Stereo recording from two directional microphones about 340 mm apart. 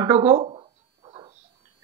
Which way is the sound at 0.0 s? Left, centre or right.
Centre.